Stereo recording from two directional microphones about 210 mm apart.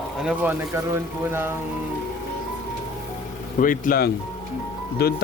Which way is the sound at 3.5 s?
40° left (ahead or behind).